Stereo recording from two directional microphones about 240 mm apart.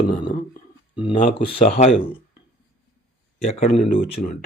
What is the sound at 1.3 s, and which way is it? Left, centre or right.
Speech, left.